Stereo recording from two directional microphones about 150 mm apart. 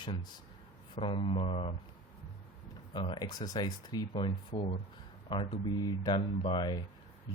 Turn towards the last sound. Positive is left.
turn(degrees=30)  # may be behind; listen again after turning